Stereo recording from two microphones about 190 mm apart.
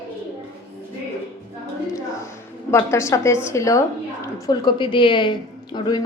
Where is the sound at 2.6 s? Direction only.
15° left (ahead or behind).